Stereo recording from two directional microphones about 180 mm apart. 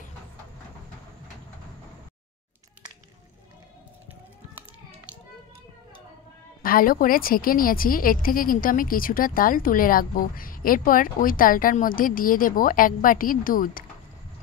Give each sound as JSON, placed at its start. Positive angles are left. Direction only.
{"t": 6.6, "sound": "a woman's voice", "side_deg": 55}